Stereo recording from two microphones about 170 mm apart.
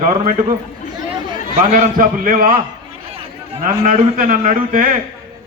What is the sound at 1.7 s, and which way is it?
Speech, 55° right (ahead or behind).